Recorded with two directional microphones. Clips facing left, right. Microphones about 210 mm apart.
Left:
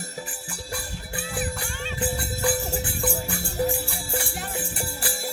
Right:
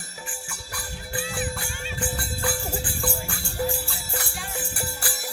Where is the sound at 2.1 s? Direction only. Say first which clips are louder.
Left 3 dB; 20° left (ahead or behind).